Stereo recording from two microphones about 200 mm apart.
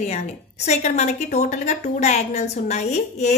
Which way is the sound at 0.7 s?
35° left (ahead or behind).